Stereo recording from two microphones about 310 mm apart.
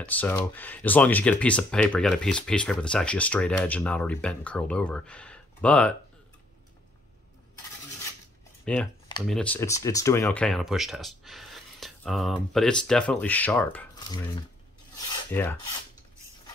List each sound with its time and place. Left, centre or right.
0.0 s speech: centre
8.7 s speech: centre
15.0 s filing: centre